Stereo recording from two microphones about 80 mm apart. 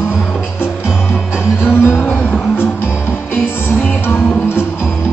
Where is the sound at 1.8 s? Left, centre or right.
Left.